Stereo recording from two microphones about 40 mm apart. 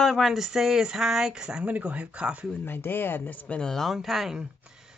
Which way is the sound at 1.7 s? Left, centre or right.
Right.